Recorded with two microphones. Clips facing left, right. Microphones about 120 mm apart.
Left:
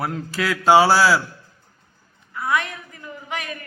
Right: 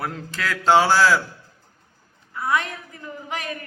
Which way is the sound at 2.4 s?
30° right (ahead or behind).